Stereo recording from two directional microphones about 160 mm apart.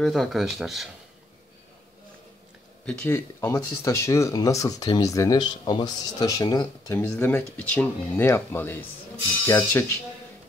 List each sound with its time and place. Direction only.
0.0 s speech: centre (ahead or behind)
3.1 s speech: 15° left (ahead or behind)
7.0 s speech: 15° left (ahead or behind)